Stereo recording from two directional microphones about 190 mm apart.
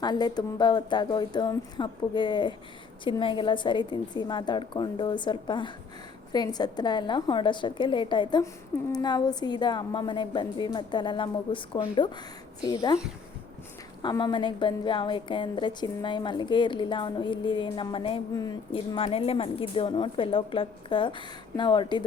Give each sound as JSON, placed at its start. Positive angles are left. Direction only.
{"t": 0.0, "sound": "a woman's voice", "side_deg": 20}
{"t": 14.0, "sound": "a woman's voice", "side_deg": 20}